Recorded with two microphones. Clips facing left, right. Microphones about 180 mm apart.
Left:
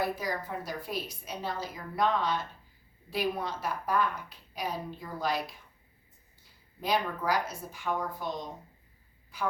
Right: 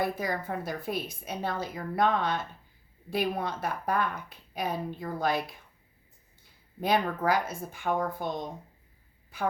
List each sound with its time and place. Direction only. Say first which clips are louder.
0.0 s a woman's voice: right 2 dB; 55° right (ahead or behind)
6.7 s a woman's voice: right 3 dB; 55° right (ahead or behind)